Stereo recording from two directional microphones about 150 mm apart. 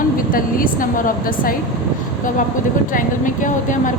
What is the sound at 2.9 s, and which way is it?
A woman's voice, 60° left (ahead or behind).